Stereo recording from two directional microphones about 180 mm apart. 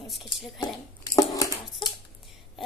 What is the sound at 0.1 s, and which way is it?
Speech, centre (ahead or behind).